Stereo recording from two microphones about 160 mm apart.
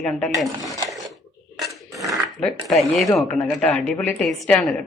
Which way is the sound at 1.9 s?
20° right (ahead or behind).